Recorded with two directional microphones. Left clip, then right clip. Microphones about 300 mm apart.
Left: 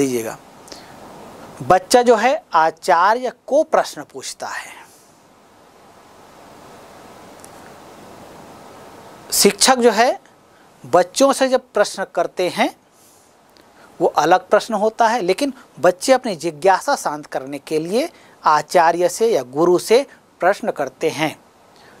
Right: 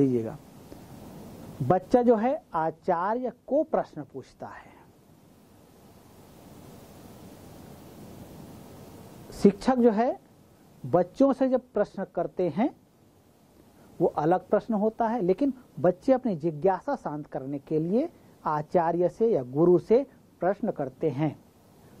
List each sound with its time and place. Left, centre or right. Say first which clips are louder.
0.0 s speech: left 6 dB; centre
3.4 s speech: left 11 dB; left
3.8 s a woman's voice: left 11 dB; centre
8.3 s a sound: left 9 dB; centre
9.4 s a woman's voice: left 9 dB; centre
14.1 s a woman's voice: left 13 dB; centre
19.4 s speech: left 7 dB; centre
19.7 s a woman's voice: left 8 dB; centre